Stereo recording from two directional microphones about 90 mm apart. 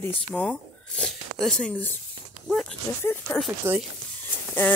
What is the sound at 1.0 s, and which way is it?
Speech, 5° left (ahead or behind).